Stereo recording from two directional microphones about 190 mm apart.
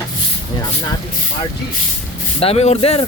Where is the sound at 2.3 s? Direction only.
30° left (ahead or behind).